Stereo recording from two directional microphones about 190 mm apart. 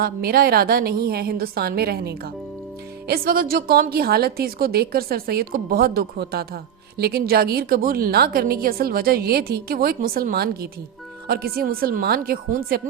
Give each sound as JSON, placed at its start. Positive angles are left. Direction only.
{"t": 0.0, "sound": "a woman's voice", "side_deg": -50}